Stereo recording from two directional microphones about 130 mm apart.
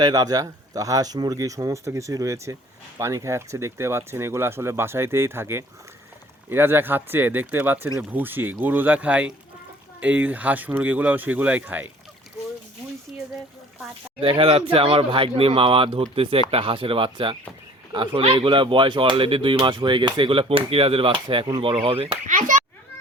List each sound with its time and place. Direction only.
0.0 s speech: 30° right (ahead or behind); by 11.9 s 15° right (ahead or behind)
14.2 s speech: 45° right (ahead or behind)
22.3 s children playing: 80° right